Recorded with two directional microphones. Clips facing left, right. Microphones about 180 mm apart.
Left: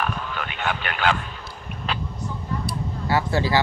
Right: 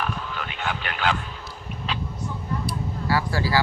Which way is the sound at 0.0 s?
60° left (ahead or behind).